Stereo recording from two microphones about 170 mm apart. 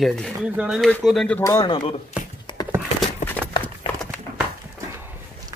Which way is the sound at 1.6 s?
30° left (ahead or behind).